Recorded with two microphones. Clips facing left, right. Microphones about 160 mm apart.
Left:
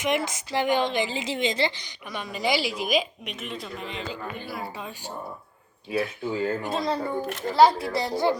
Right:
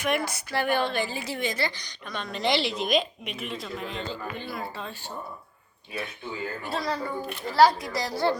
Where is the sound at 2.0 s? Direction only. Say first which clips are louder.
Even; 5° left (ahead or behind).